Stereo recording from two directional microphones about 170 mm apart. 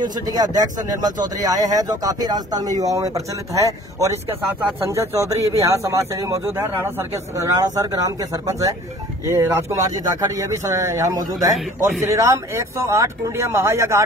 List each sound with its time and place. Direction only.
0.0 s speech: 25° right (ahead or behind)